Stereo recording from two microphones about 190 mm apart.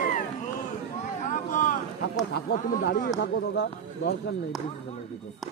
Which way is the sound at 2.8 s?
50° left (ahead or behind).